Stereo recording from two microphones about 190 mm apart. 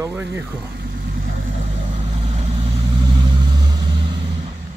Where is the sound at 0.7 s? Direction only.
55° right (ahead or behind).